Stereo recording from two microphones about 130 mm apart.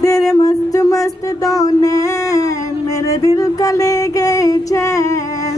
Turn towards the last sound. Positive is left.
turn(degrees=25)  # may be behind; listen again after turning